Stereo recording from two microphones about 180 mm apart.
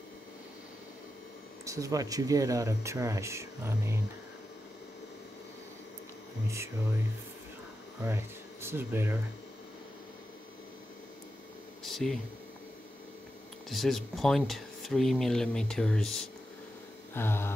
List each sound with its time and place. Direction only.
1.6 s speech: 20° right (ahead or behind)
6.4 s speech: 15° right (ahead or behind)
8.0 s speech: 15° right (ahead or behind)
11.8 s a sound: centre (ahead or behind)
13.7 s speech: centre (ahead or behind)
17.1 s a sound: 15° left (ahead or behind)